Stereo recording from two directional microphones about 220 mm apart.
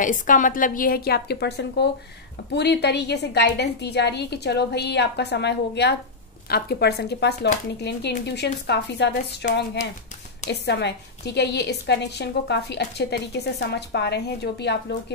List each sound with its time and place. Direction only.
0.0 s a woman's voice: 35° left (ahead or behind)
10.5 s a woman's voice: 50° left (ahead or behind)